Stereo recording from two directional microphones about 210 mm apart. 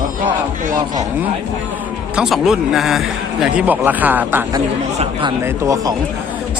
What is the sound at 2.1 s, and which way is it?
Speech, 5° right (ahead or behind).